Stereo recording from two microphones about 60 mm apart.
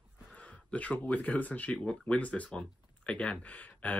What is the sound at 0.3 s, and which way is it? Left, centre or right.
Speech, left.